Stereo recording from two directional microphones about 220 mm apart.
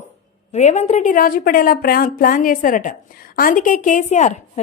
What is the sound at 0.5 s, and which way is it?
A woman's voice, 30° left (ahead or behind).